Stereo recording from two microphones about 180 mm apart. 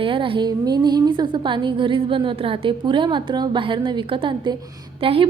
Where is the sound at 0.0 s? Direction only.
30° right (ahead or behind).